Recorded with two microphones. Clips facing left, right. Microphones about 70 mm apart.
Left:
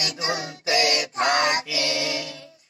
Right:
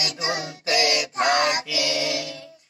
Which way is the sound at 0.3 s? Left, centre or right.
Left.